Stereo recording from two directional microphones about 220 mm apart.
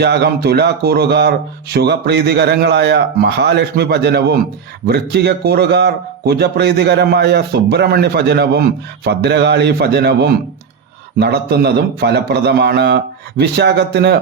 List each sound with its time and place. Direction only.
0.0 s a man's voice: 50° right (ahead or behind)